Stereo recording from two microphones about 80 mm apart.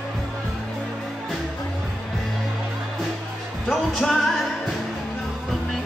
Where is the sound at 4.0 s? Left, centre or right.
Centre.